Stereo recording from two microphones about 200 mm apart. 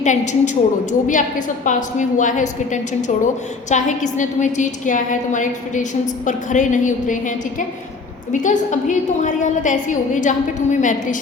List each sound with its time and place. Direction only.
0.0 s a woman's voice: 35° left (ahead or behind)